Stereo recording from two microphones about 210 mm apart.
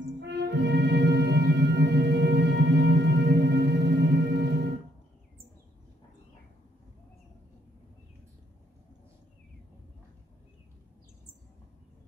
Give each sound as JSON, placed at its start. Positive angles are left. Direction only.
{"t": 0.2, "sound": "music", "side_deg": -55}